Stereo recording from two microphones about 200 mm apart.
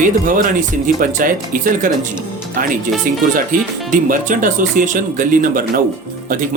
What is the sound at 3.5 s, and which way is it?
Speech, 40° right (ahead or behind).